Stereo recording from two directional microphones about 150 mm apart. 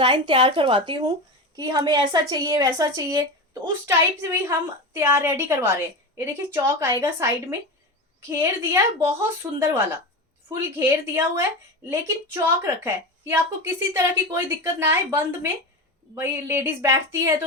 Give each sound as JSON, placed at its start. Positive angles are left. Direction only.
{"t": 0.0, "sound": "a woman's voice", "side_deg": -35}